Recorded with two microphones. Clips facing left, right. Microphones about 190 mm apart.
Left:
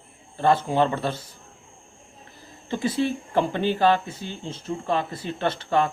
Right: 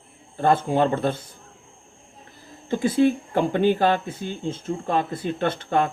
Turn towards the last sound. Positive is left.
turn(degrees=-55)  # may be behind; listen again after turning